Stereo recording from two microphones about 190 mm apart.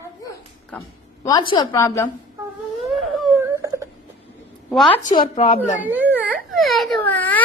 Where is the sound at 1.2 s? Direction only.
25° left (ahead or behind).